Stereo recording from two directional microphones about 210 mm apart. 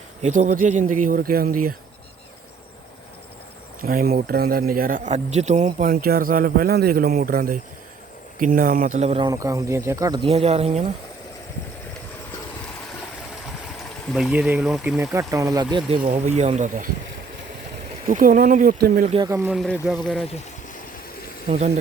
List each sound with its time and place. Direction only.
0.2 s speech: 35° right (ahead or behind)
3.8 s speech: 45° right (ahead or behind); by 10.2 s 15° right (ahead or behind)
10.2 s speech: 30° right (ahead or behind)
14.1 s speech: centre (ahead or behind); by 16.9 s 35° right (ahead or behind)
18.0 s speech: 40° right (ahead or behind)
19.3 s speech: 10° right (ahead or behind)